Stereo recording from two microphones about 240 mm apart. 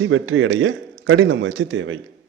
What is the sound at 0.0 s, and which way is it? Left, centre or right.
A man's voice, right.